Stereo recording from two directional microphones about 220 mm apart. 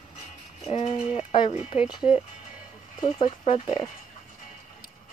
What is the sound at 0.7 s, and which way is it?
Speech, 25° left (ahead or behind).